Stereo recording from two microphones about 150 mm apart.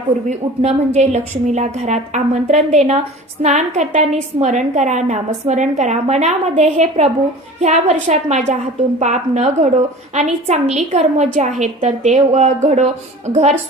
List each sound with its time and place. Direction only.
0.3 s a woman's voice: 50° right (ahead or behind)